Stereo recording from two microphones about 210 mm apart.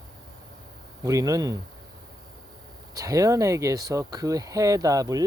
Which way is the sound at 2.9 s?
15° right (ahead or behind).